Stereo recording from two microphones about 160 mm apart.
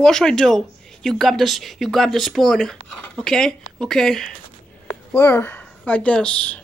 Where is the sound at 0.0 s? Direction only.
5° left (ahead or behind).